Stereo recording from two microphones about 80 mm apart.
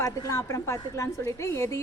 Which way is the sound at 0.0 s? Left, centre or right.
Left.